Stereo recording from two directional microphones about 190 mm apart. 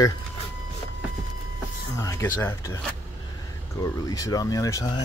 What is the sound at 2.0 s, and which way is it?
Speech, 15° left (ahead or behind).